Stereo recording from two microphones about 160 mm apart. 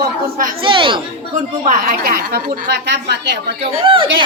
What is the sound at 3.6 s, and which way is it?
Speech, 35° right (ahead or behind).